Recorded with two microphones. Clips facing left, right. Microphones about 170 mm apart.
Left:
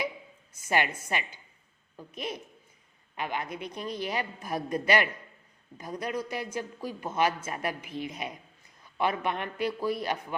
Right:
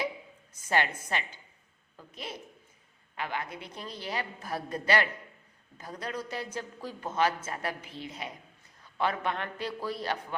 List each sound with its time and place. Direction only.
1.0 s a man's voice: 10° left (ahead or behind)